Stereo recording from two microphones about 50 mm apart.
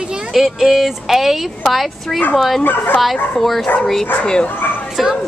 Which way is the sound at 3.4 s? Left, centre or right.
Centre.